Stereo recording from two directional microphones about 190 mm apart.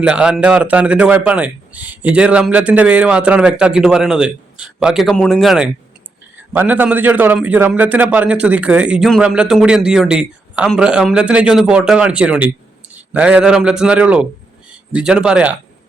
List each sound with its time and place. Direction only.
0.0 s a man's voice: 5° right (ahead or behind)